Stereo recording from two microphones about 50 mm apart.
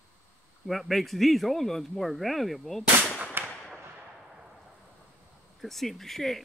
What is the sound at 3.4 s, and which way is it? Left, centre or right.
Fireworks, right.